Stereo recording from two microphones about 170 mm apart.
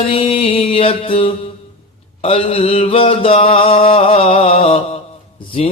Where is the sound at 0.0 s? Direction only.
35° left (ahead or behind).